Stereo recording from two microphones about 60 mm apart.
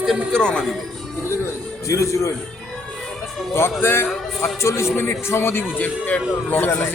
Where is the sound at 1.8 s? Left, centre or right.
Left.